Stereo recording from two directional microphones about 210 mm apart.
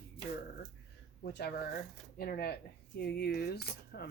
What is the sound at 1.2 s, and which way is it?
Speech, 50° left (ahead or behind).